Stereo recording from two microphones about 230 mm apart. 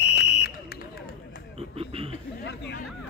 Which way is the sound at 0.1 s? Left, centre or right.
Left.